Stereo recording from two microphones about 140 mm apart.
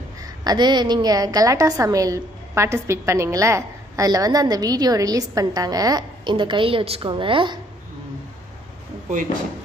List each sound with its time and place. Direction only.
0.2 s a woman's voice: 30° right (ahead or behind)